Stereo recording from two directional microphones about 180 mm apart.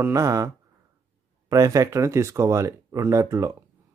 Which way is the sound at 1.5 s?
20° right (ahead or behind).